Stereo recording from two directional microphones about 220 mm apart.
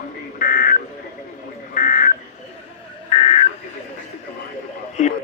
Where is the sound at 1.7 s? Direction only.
35° left (ahead or behind).